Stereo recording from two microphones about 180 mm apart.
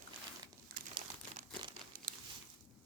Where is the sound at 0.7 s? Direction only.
50° right (ahead or behind).